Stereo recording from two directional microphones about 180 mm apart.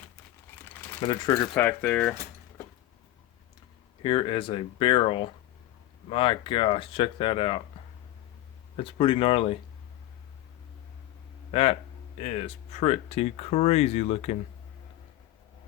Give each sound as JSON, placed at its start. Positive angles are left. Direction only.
{"t": 1.0, "sound": "speech", "side_deg": 30}
{"t": 1.5, "sound": "speech", "side_deg": 10}
{"t": 4.0, "sound": "speech", "side_deg": 30}
{"t": 8.7, "sound": "speech", "side_deg": 30}
{"t": 11.5, "sound": "speech", "side_deg": 35}